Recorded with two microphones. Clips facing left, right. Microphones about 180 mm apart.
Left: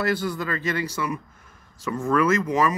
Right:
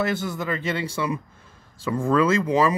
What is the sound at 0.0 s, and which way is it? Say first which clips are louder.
Speech: even; 20° right (ahead or behind).